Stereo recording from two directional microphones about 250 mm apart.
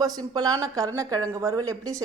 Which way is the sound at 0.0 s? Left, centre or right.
Centre.